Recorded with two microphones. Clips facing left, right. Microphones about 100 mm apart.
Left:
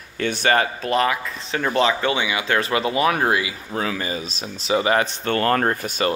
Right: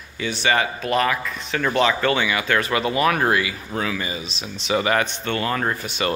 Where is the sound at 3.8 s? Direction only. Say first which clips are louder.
Left 1 dB; 35° left (ahead or behind).